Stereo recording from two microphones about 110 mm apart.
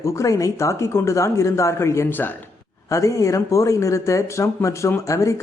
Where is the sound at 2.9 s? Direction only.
30° left (ahead or behind).